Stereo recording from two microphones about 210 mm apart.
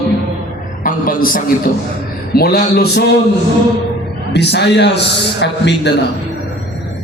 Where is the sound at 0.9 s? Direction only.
40° left (ahead or behind).